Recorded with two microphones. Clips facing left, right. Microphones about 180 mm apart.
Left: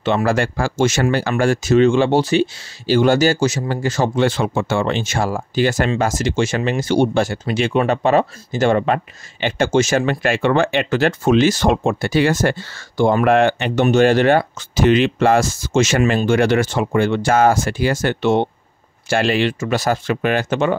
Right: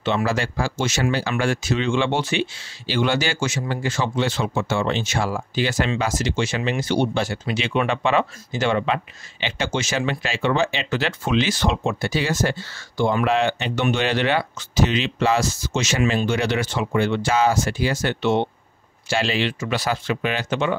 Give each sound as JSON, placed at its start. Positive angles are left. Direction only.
{"t": 0.0, "sound": "speech", "side_deg": 50}